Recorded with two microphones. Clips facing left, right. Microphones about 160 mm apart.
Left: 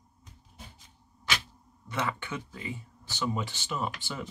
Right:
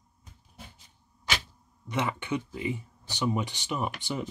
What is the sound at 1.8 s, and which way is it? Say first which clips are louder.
Speech: right 3 dB; 20° right (ahead or behind).